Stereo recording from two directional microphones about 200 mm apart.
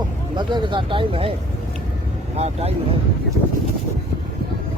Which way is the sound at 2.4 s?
30° right (ahead or behind).